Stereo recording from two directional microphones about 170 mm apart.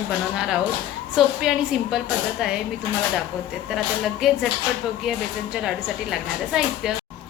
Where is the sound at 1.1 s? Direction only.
5° right (ahead or behind).